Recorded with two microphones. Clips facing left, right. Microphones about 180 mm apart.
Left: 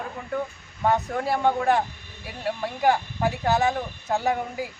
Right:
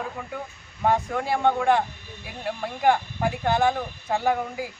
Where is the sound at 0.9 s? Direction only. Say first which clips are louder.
Even; centre (ahead or behind).